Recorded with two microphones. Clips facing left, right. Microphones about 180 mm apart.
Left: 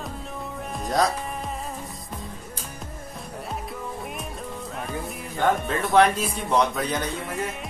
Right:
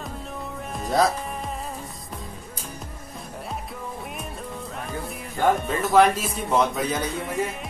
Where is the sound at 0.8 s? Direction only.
Centre (ahead or behind).